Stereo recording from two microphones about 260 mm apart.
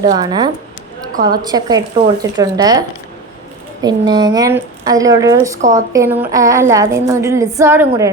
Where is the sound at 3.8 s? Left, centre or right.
Centre.